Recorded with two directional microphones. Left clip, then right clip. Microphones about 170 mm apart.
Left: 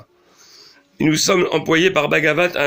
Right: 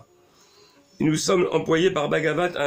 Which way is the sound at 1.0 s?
30° left (ahead or behind).